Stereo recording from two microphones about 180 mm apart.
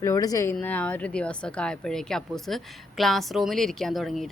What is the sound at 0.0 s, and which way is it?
Speech, 20° left (ahead or behind).